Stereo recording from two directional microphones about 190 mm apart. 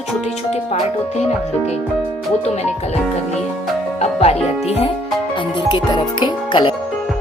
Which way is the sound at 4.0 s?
35° left (ahead or behind).